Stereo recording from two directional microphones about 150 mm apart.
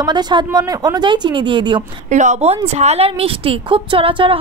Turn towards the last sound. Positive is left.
turn(degrees=-35)  # may be behind; listen again after turning